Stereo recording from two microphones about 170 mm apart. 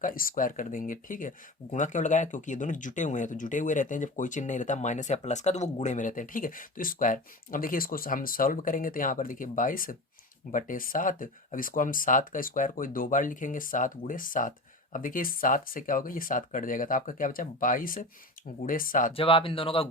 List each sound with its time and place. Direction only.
0.0 s speech: 55° left (ahead or behind)
19.1 s speech: 30° left (ahead or behind)